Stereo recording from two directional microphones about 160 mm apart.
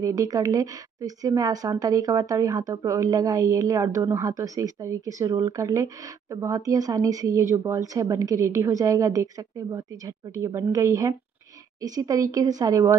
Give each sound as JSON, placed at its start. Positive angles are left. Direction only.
{"t": 0.0, "sound": "speech", "side_deg": -20}